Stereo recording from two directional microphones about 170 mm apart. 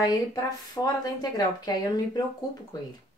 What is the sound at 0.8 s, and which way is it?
Speech, 20° left (ahead or behind).